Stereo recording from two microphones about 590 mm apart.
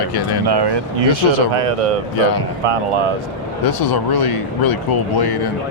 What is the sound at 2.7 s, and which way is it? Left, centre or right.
Speech, right.